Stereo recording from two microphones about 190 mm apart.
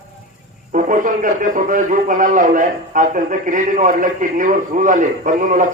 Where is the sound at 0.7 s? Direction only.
45° right (ahead or behind).